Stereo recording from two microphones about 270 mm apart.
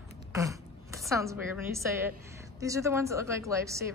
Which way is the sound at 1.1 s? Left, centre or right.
Centre.